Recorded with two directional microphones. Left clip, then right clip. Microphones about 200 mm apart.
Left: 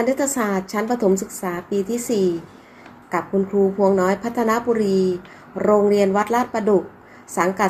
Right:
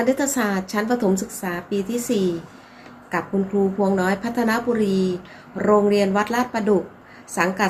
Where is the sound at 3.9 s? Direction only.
10° right (ahead or behind).